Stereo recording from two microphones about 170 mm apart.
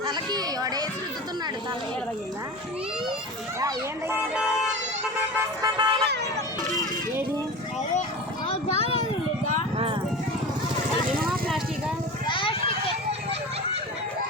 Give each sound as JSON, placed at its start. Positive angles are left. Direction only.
{"t": 0.0, "sound": "speech", "side_deg": -25}
{"t": 5.6, "sound": "speech", "side_deg": -25}
{"t": 8.4, "sound": "a sound", "side_deg": 35}
{"t": 9.7, "sound": "clip-clop", "side_deg": -35}
{"t": 11.3, "sound": "vehicle", "side_deg": 0}
{"t": 12.2, "sound": "children playing", "side_deg": 30}